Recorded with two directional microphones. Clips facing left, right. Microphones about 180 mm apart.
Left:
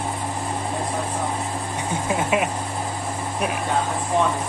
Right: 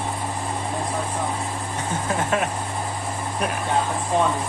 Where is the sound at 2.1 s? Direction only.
10° left (ahead or behind).